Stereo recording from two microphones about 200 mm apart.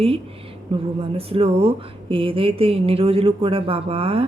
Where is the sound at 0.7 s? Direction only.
30° right (ahead or behind).